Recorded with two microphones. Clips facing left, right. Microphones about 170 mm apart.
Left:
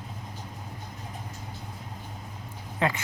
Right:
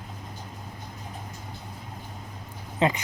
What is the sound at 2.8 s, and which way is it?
Speech, 20° right (ahead or behind).